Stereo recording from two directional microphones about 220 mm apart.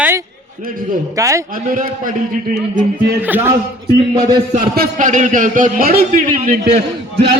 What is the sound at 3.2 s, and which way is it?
Speech, 10° right (ahead or behind).